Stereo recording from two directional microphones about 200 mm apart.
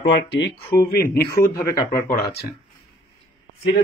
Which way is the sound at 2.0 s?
50° left (ahead or behind).